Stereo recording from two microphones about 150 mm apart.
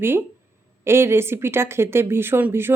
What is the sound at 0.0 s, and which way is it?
A woman's voice, 15° right (ahead or behind).